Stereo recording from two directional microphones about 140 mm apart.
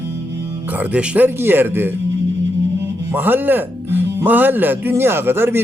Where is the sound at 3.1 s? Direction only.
15° right (ahead or behind).